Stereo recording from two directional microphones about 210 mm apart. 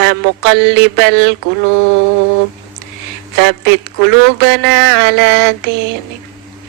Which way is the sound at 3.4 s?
55° right (ahead or behind).